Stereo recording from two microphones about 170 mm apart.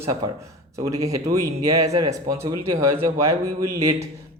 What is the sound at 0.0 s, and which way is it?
Speech, 20° right (ahead or behind).